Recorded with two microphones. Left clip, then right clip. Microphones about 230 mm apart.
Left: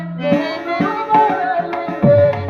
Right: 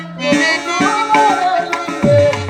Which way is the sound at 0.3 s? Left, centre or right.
Left.